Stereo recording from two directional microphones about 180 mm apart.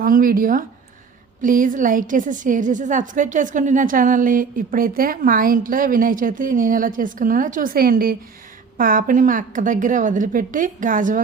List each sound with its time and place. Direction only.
0.0 s a woman's voice: 50° right (ahead or behind)